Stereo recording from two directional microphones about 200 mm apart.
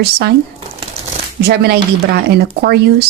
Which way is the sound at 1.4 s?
55° right (ahead or behind).